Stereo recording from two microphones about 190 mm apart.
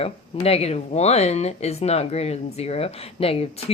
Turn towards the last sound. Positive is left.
turn(degrees=30)  # may be behind; listen again after turning